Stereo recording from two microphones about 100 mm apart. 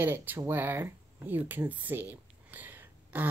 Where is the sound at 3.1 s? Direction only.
15° right (ahead or behind).